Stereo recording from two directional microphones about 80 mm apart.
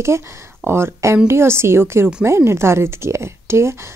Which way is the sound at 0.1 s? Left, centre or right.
Right.